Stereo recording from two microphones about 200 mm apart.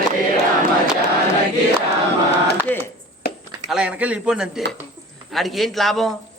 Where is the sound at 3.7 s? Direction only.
5° right (ahead or behind).